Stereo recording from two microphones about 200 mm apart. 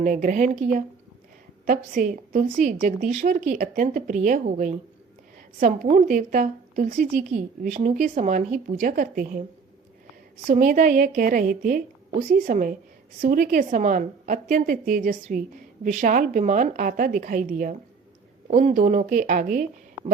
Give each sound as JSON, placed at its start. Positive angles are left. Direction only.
{"t": 0.0, "sound": "a woman's voice", "side_deg": -40}
{"t": 10.5, "sound": "a woman's voice", "side_deg": -40}